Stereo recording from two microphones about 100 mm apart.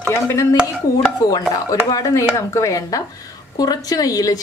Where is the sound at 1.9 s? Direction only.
35° left (ahead or behind).